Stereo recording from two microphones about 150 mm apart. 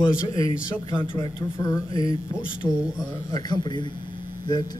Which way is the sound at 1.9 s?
35° right (ahead or behind).